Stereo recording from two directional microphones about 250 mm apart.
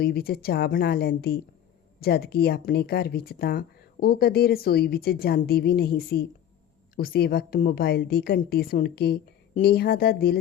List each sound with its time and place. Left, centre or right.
0.0 s speech: left